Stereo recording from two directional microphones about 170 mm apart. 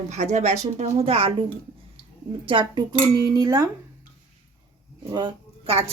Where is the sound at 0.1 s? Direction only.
40° right (ahead or behind).